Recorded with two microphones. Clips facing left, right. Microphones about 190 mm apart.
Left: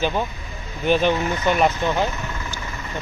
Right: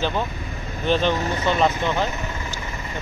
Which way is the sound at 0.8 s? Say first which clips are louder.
Left 2 dB; 10° left (ahead or behind).